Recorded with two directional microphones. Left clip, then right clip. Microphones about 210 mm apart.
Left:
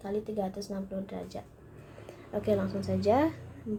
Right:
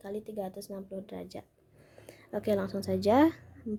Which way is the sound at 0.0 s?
45° right (ahead or behind).